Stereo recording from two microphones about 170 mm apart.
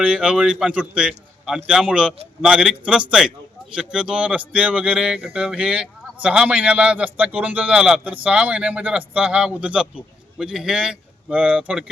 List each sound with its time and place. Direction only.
0.0 s speech: 5° right (ahead or behind)